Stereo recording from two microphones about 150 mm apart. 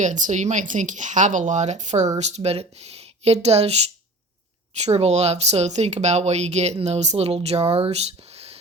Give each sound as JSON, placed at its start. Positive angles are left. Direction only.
{"t": 0.0, "sound": "speech", "side_deg": -55}